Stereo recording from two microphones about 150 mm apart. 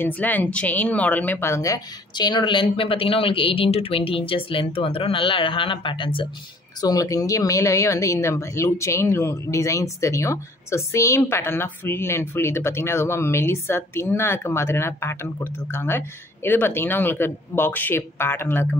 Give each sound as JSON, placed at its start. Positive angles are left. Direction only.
{"t": 0.0, "sound": "speech", "side_deg": 10}
{"t": 6.8, "sound": "speech", "side_deg": 25}